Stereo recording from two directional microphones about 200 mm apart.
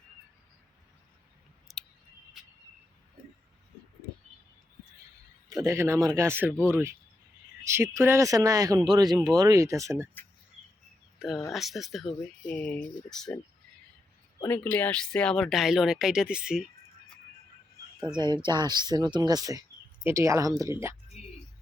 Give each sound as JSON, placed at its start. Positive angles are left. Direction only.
{"t": 1.7, "sound": "scissors", "side_deg": 0}
{"t": 5.6, "sound": "speech", "side_deg": -15}
{"t": 11.2, "sound": "speech", "side_deg": -5}
{"t": 14.3, "sound": "speech", "side_deg": 10}
{"t": 18.4, "sound": "speech", "side_deg": -20}